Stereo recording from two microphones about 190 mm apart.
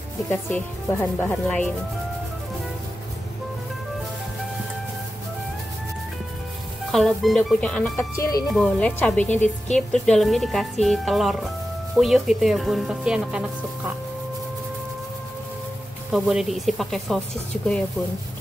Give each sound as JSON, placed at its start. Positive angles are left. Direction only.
{"t": 0.3, "sound": "speech", "side_deg": 10}
{"t": 6.9, "sound": "a woman's voice", "side_deg": 0}
{"t": 8.2, "sound": "speech", "side_deg": 20}
{"t": 8.5, "sound": "a woman's voice", "side_deg": 5}
{"t": 16.1, "sound": "a woman's voice", "side_deg": 0}